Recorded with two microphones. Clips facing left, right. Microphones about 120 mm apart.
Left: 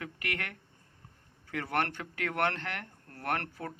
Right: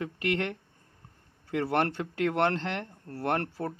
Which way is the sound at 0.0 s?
25° right (ahead or behind).